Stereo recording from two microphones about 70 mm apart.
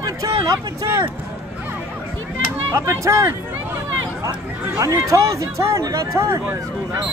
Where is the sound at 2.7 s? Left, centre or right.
Right.